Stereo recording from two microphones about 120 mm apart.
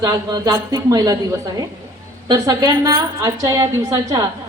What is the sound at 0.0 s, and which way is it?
A woman's voice, 35° right (ahead or behind).